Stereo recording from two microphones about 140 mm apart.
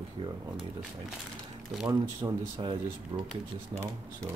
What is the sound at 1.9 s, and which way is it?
Speech, 25° right (ahead or behind).